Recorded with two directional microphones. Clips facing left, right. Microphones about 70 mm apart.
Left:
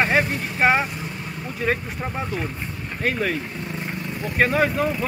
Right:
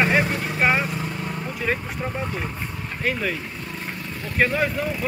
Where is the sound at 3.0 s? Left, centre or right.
Left.